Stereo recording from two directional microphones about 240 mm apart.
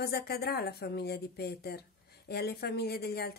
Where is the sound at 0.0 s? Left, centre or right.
Left.